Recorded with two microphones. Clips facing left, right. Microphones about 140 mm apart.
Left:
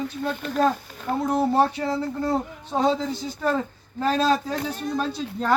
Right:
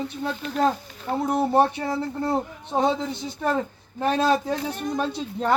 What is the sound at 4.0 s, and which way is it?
Speech, 20° right (ahead or behind).